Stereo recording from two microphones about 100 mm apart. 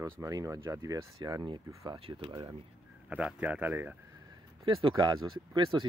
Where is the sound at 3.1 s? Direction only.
10° right (ahead or behind).